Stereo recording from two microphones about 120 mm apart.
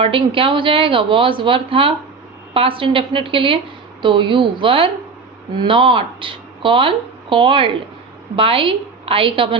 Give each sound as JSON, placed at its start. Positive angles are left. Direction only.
{"t": 0.0, "sound": "speech", "side_deg": -45}